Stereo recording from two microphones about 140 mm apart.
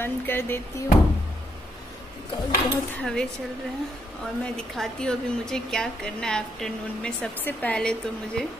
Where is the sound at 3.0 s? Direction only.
5° left (ahead or behind).